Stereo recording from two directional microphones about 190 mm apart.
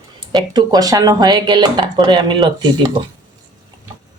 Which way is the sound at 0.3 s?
20° right (ahead or behind).